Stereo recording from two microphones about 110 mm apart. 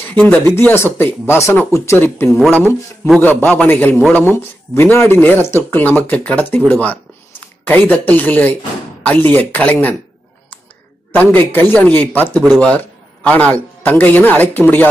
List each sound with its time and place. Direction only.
0.1 s speech: 15° left (ahead or behind)
11.1 s a man's voice: 15° left (ahead or behind)